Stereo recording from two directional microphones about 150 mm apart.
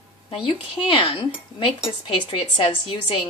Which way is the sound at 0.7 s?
35° left (ahead or behind).